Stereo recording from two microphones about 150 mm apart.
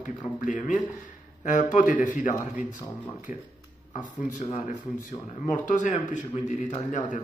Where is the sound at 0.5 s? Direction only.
55° left (ahead or behind).